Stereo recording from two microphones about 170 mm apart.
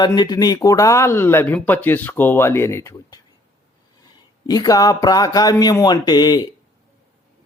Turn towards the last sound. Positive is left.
turn(degrees=25)  # may be behind; listen again after turning